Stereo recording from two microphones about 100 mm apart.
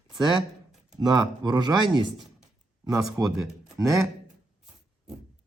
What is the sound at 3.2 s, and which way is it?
Speech, 35° right (ahead or behind).